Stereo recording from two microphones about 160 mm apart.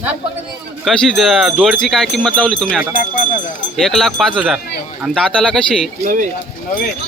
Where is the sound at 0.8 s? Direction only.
Centre (ahead or behind).